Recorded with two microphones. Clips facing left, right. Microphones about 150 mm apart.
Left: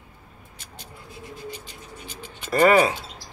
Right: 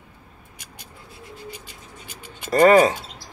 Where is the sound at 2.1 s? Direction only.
10° right (ahead or behind).